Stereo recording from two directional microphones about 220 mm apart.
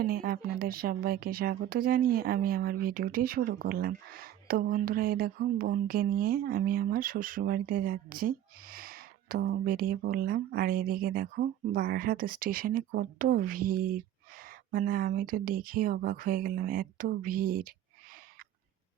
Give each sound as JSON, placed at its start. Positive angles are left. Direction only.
{"t": 0.0, "sound": "speech", "side_deg": -40}